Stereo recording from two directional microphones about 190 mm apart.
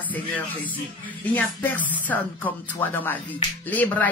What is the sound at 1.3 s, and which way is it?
Speech, 10° left (ahead or behind).